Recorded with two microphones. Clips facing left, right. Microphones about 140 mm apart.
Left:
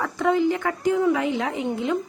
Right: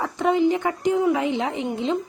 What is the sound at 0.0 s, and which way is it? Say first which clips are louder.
Speech: right 1 dB; 20° right (ahead or behind).